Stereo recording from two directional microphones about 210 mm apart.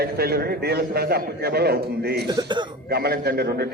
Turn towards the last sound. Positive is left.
turn(degrees=-50)  # may be behind; listen again after turning